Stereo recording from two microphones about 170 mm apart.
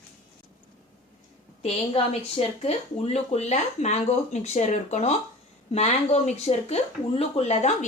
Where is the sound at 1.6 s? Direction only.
35° left (ahead or behind).